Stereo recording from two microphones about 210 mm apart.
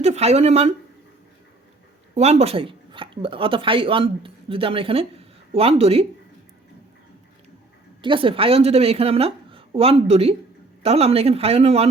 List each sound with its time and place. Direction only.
0.0 s speech: 30° right (ahead or behind)
2.1 s speech: 30° right (ahead or behind)
8.0 s speech: 25° right (ahead or behind)